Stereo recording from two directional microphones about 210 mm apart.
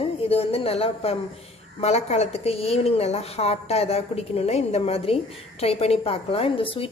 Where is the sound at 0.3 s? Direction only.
30° left (ahead or behind).